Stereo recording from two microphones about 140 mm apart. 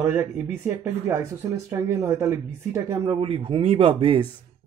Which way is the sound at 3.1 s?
40° right (ahead or behind).